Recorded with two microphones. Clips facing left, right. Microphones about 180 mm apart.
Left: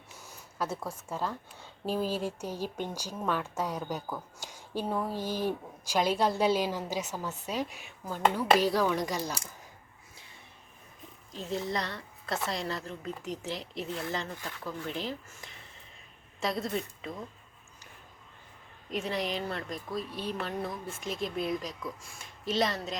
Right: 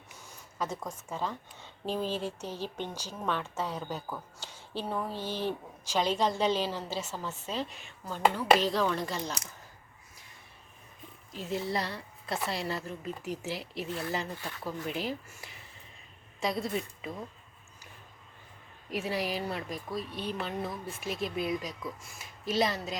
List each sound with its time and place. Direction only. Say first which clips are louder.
0.6 s a woman's voice: left 1 dB; 10° left (ahead or behind)
11.5 s a woman's voice: right 1 dB; 5° right (ahead or behind)
18.9 s speech: even; 5° right (ahead or behind)